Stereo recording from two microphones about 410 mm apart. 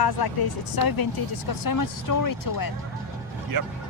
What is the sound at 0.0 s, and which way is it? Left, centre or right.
Speech, left.